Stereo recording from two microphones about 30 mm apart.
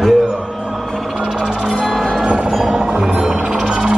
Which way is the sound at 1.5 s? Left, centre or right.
Right.